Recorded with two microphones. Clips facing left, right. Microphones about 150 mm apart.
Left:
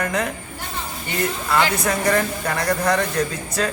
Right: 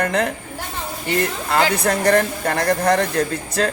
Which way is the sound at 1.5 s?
50° right (ahead or behind).